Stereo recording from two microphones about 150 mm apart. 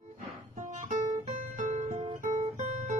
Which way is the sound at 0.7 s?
50° right (ahead or behind).